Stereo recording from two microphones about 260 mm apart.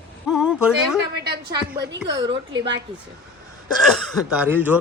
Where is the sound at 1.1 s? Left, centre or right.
Right.